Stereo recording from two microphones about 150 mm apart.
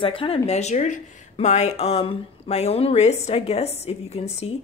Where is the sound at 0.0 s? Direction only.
35° left (ahead or behind).